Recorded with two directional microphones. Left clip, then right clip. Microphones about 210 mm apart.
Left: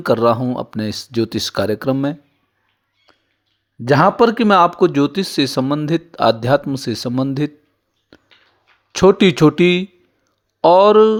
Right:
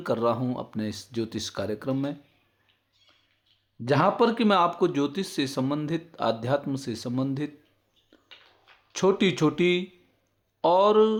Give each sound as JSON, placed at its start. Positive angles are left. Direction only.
{"t": 0.0, "sound": "speech", "side_deg": 35}
{"t": 3.8, "sound": "speech", "side_deg": 40}
{"t": 8.1, "sound": "a sound", "side_deg": 35}
{"t": 8.9, "sound": "speech", "side_deg": 40}